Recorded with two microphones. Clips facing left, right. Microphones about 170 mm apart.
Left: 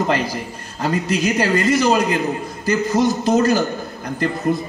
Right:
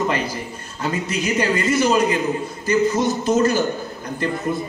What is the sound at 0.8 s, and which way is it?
Speech, 40° left (ahead or behind).